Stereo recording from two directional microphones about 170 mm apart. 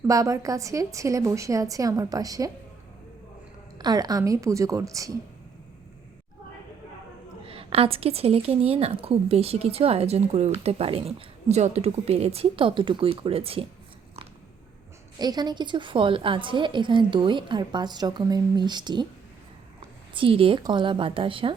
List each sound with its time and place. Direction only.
0.1 s a woman's voice: 20° right (ahead or behind)
3.8 s a woman's voice: 25° right (ahead or behind)
7.4 s speech: 35° right (ahead or behind)
15.2 s a woman's voice: 25° right (ahead or behind)
20.1 s speech: 30° right (ahead or behind)